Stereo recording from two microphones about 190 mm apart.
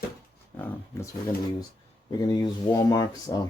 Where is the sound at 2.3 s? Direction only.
20° left (ahead or behind).